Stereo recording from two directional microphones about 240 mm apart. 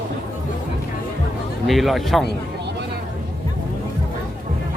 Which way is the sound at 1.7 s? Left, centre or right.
Centre.